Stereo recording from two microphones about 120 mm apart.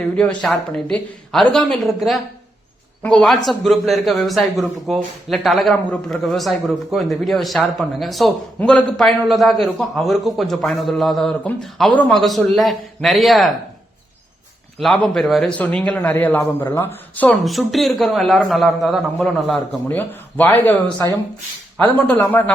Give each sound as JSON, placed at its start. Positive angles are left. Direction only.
{"t": 0.2, "sound": "a man's voice", "side_deg": 10}
{"t": 14.8, "sound": "a man's voice", "side_deg": 5}
{"t": 17.4, "sound": "a man's voice", "side_deg": 0}
{"t": 19.9, "sound": "speech", "side_deg": 15}
{"t": 21.9, "sound": "speech", "side_deg": 15}